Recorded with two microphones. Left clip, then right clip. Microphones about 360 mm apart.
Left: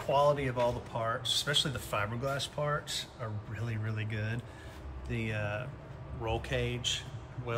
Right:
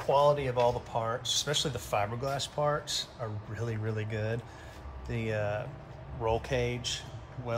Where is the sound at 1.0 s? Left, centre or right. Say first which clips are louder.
Left 2 dB; centre.